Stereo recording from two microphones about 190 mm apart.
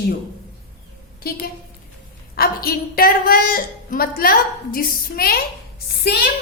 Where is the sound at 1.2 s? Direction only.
50° left (ahead or behind).